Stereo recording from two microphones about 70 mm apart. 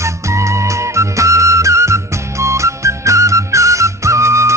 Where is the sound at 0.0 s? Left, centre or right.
Right.